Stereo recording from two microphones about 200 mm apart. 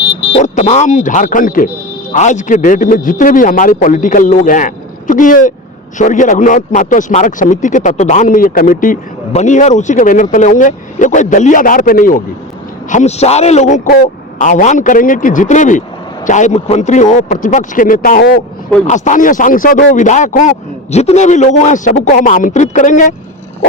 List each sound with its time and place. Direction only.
0.0 s speech: 25° left (ahead or behind)